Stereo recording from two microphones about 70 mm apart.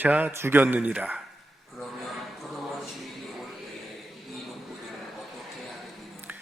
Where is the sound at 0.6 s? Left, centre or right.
Right.